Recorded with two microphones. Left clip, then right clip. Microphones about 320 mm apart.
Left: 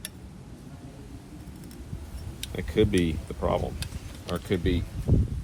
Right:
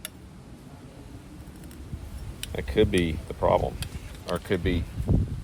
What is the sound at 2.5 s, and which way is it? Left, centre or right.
Speech, right.